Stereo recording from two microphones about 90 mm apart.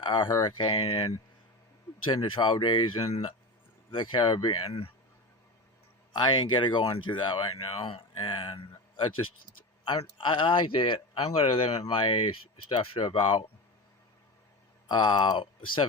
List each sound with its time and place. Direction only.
0.0 s speech: 65° left (ahead or behind); by 4.9 s 90° left
6.1 s speech: 55° left (ahead or behind); by 8.6 s 75° left (ahead or behind)
9.8 s speech: 65° left (ahead or behind); by 11.8 s 90° left
11.9 s speech: 80° left
13.1 s speech: 70° left (ahead or behind)
14.8 s speech: 55° left (ahead or behind)